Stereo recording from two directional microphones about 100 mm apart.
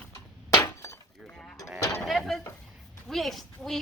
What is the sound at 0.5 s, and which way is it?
Glass, 30° left (ahead or behind).